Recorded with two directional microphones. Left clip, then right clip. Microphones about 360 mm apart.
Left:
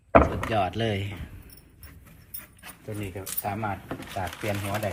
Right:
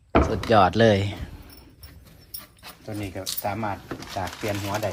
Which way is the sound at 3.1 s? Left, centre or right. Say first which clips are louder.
Right 4 dB; right.